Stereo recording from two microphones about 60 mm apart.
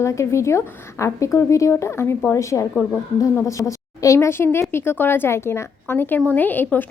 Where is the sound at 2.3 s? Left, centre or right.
Left.